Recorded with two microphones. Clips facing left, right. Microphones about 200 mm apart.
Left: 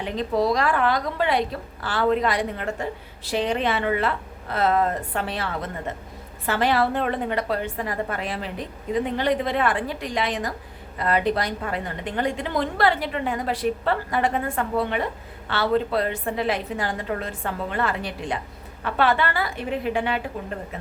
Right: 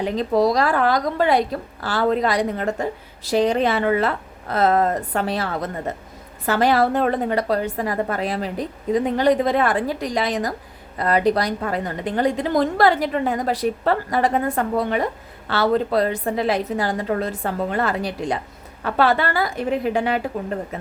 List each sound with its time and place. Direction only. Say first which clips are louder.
0.0 s a woman's voice: right 5 dB; 40° right (ahead or behind)